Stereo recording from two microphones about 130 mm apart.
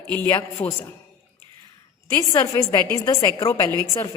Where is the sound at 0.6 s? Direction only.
50° left (ahead or behind).